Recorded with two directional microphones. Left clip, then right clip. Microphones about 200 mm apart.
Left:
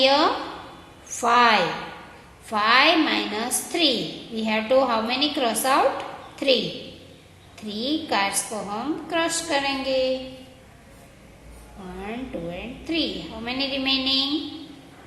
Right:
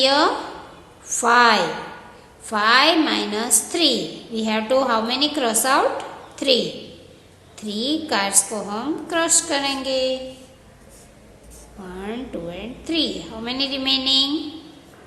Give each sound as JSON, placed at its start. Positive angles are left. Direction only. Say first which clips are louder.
{"t": 0.0, "sound": "a woman's voice", "louder": "right 2 dB", "side_deg": -15}
{"t": 7.6, "sound": "a woman's voice", "louder": "right 3 dB", "side_deg": -15}
{"t": 12.0, "sound": "a woman's voice", "louder": "right 2 dB", "side_deg": -15}